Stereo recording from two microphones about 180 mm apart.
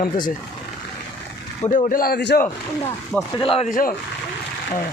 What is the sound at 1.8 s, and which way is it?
Speech, 55° left (ahead or behind).